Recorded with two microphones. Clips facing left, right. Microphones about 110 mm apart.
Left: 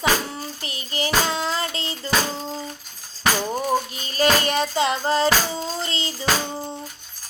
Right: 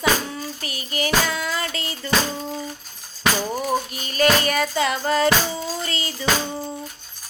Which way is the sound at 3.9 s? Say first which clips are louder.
Right 1 dB; 30° left (ahead or behind).